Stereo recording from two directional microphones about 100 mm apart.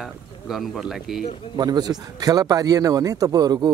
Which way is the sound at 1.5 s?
45° right (ahead or behind).